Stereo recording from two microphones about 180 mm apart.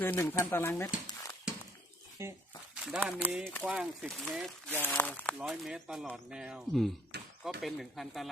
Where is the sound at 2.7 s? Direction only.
5° right (ahead or behind).